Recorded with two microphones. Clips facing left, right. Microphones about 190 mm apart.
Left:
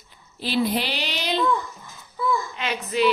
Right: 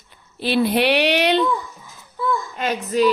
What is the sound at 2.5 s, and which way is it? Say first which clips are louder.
Speech: right 5 dB; 45° right (ahead or behind).